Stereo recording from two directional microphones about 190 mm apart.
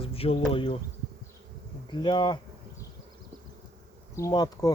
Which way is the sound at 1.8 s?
25° left (ahead or behind).